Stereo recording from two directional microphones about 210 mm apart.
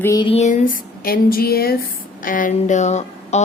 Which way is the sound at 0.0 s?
20° left (ahead or behind).